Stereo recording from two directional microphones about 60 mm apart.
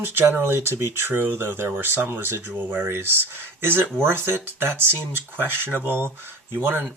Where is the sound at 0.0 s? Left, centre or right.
Right.